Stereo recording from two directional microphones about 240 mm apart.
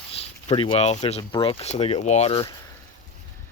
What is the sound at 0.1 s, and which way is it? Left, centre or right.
Speech, left.